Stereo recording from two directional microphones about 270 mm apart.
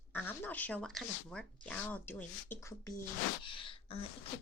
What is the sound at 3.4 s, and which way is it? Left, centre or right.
Gasp, centre.